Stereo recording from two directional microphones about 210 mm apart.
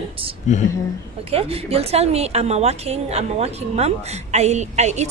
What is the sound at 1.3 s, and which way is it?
A woman's voice, 30° right (ahead or behind).